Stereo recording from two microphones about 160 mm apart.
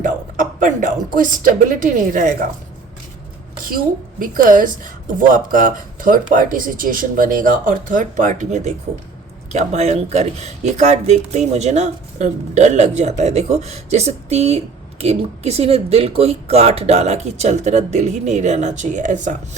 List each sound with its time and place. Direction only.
0.0 s speech: 55° right (ahead or behind)
4.2 s speech: 55° right (ahead or behind)